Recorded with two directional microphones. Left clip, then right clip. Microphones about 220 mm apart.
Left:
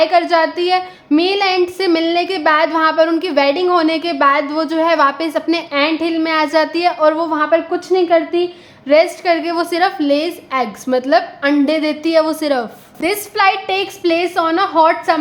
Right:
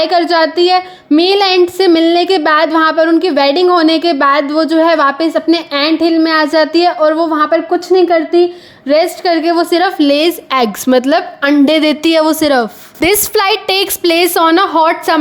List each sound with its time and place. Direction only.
0.0 s a woman's voice: 30° right (ahead or behind)